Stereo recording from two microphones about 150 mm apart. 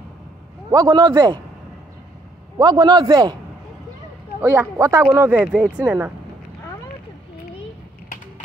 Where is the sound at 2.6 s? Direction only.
25° right (ahead or behind).